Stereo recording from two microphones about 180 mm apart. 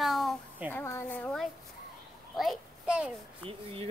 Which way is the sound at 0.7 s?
10° left (ahead or behind).